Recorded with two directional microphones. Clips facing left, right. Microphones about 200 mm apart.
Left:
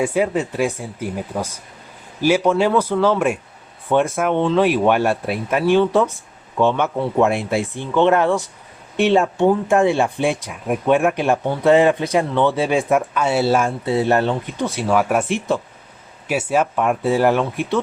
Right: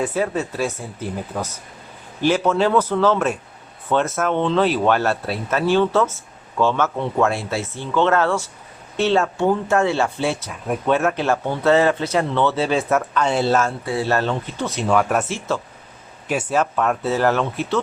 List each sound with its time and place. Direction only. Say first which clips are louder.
0.0 s speech: left 3 dB; 15° left (ahead or behind)